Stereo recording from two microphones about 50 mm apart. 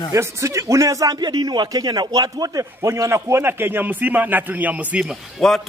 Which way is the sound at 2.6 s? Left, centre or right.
Right.